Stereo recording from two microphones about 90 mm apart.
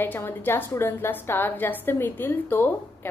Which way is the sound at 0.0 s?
25° left (ahead or behind).